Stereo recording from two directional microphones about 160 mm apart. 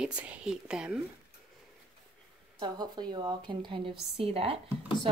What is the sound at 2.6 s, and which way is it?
Speech, 25° right (ahead or behind).